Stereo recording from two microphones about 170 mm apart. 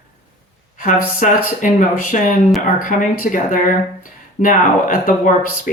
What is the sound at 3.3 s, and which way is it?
Speech, 55° left (ahead or behind).